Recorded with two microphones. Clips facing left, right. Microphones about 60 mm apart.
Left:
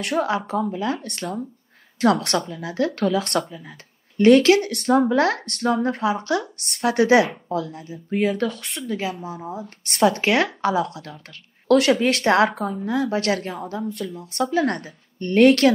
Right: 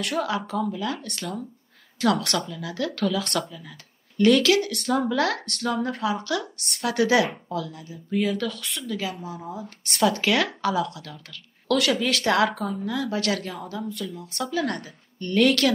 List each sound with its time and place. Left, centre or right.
0.0 s speech: left
9.4 s speech: left
9.8 s speech: left
11.6 s a sound: left
12.0 s speech: left